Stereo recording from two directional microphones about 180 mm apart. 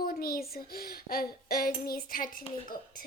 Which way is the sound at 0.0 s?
55° left (ahead or behind).